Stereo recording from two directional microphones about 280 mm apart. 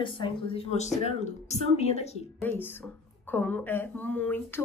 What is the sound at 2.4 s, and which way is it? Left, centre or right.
A woman's voice, centre.